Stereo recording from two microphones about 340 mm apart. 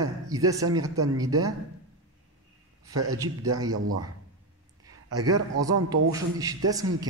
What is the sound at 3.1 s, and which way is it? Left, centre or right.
Speech, centre.